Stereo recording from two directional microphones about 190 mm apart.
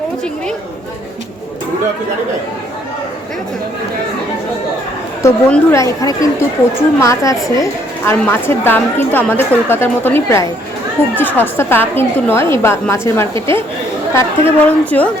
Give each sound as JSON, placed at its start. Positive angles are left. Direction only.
{"t": 5.2, "sound": "a woman's voice", "side_deg": 15}